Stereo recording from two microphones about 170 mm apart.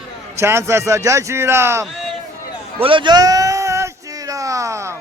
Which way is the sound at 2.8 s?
30° right (ahead or behind).